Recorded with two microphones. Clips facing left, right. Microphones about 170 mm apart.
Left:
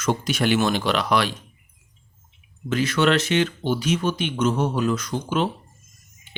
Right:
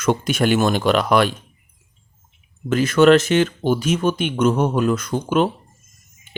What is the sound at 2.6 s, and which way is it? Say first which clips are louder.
Speech: right 7 dB; 50° right (ahead or behind).